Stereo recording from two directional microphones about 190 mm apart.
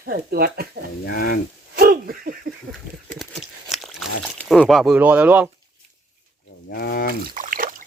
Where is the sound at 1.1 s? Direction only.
55° left (ahead or behind).